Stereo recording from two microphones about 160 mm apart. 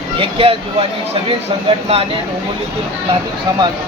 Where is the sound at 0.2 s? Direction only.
35° right (ahead or behind).